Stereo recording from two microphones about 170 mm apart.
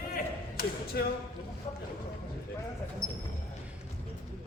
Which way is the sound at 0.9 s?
60° left (ahead or behind).